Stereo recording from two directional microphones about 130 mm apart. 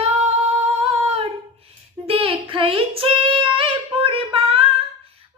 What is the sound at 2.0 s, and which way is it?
Child singing, 45° right (ahead or behind).